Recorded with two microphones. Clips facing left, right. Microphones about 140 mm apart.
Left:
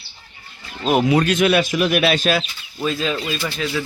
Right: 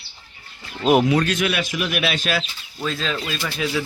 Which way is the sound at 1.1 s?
15° left (ahead or behind).